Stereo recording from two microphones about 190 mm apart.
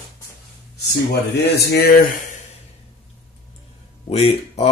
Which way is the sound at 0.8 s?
60° left (ahead or behind).